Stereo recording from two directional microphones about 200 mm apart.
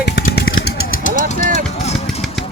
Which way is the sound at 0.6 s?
45° left (ahead or behind).